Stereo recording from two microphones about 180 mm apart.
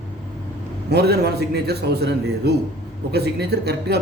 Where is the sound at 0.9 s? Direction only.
65° right (ahead or behind).